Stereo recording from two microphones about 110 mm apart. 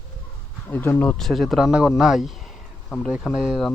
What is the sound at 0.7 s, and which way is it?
Speech, 20° left (ahead or behind).